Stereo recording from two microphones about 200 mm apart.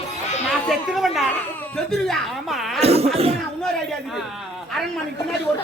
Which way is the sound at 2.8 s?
30° right (ahead or behind).